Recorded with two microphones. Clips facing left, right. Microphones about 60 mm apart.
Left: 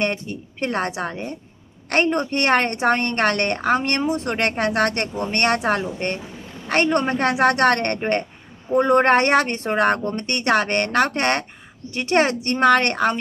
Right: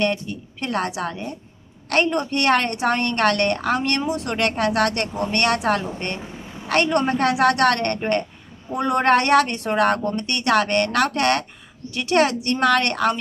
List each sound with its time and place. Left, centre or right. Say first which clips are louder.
0.0 s a woman's voice: right 1 dB; left